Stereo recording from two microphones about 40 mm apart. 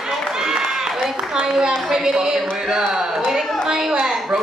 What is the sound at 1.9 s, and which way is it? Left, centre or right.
A woman's voice, centre.